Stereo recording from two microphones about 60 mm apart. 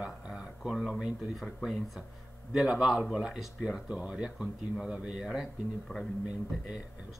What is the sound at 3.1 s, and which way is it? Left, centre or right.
Speech, centre.